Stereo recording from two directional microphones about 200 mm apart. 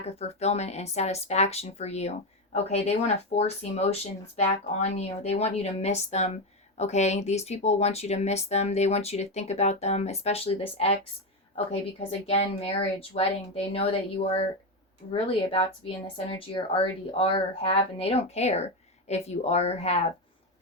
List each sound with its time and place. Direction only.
0.0 s speech: 30° left (ahead or behind)